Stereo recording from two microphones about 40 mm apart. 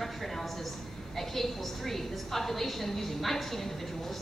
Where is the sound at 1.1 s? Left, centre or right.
Centre.